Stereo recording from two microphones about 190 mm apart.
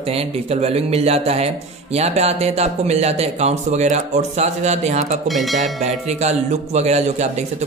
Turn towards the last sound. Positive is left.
turn(degrees=-35)  # may be behind; listen again after turning